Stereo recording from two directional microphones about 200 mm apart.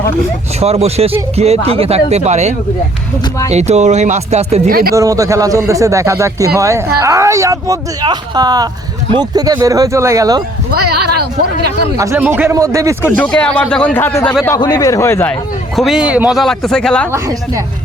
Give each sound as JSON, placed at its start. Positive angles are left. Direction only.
{"t": 0.6, "sound": "speech", "side_deg": -30}
{"t": 3.5, "sound": "speech", "side_deg": -35}
{"t": 4.7, "sound": "speech", "side_deg": -50}
{"t": 4.9, "sound": "speech", "side_deg": -15}
{"t": 10.7, "sound": "a sound", "side_deg": -50}
{"t": 11.9, "sound": "speech", "side_deg": -10}
{"t": 13.1, "sound": "speech", "side_deg": 5}
{"t": 15.7, "sound": "speech", "side_deg": 0}